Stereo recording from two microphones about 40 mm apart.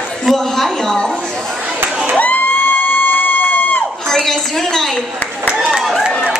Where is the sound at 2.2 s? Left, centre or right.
Left.